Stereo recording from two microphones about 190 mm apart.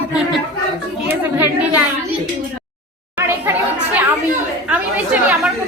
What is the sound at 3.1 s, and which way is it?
Chatter, 10° right (ahead or behind).